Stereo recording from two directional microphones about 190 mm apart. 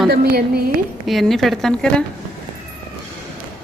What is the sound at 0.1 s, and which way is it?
Speech, 55° right (ahead or behind).